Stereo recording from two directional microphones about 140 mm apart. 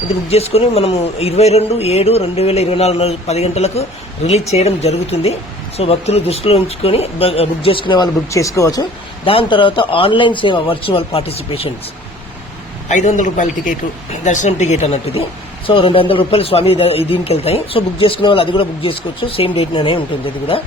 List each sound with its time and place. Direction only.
0.3 s a man's voice: 45° left (ahead or behind); by 8.9 s 25° left (ahead or behind)
9.2 s a man's voice: 40° left (ahead or behind)
12.9 s a man's voice: 60° left (ahead or behind); by 20.6 s 40° left (ahead or behind)